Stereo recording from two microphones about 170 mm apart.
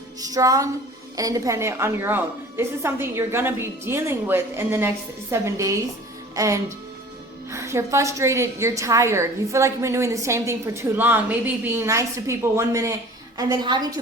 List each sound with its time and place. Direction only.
0.2 s music: 20° right (ahead or behind)
1.1 s a woman's voice: 20° right (ahead or behind)